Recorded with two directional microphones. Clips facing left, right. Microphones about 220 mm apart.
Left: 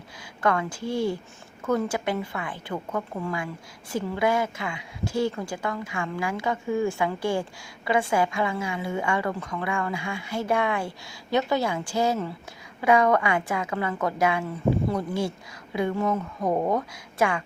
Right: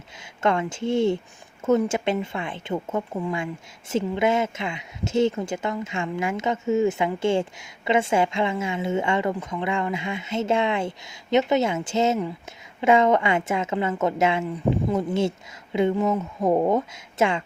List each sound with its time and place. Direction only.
0.2 s a woman's voice: 25° right (ahead or behind)